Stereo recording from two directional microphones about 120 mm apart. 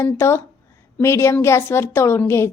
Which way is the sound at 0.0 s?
20° left (ahead or behind).